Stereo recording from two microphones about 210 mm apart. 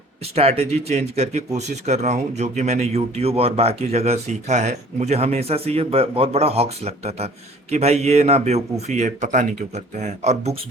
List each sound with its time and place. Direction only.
0.3 s speech: 30° right (ahead or behind)